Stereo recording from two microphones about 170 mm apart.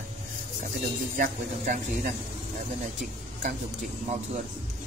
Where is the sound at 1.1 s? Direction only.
55° right (ahead or behind).